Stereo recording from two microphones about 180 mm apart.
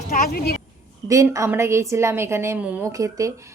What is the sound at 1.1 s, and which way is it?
Speech, 15° right (ahead or behind).